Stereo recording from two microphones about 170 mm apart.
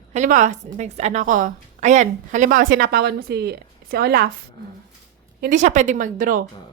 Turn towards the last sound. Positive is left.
turn(degrees=-55)  # may be behind; listen again after turning